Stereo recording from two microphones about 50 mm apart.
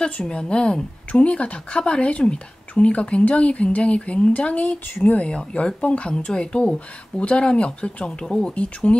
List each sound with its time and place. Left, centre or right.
0.0 s a woman's voice: centre